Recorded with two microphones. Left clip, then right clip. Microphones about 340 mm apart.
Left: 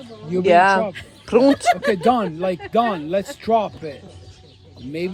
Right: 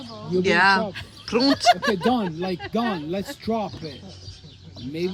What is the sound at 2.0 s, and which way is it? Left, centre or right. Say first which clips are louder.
Speech: left 6 dB; centre.